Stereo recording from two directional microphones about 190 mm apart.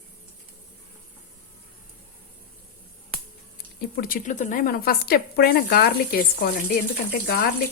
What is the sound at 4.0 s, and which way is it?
Speech, 50° left (ahead or behind).